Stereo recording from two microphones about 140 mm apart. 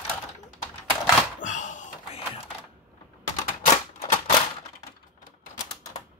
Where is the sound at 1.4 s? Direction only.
60° left (ahead or behind).